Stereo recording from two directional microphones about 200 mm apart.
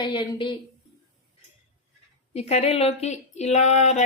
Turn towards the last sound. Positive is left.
turn(degrees=35)  # may be behind; listen again after turning